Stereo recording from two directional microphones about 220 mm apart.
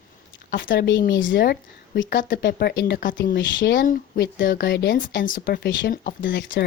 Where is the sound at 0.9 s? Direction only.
55° left (ahead or behind).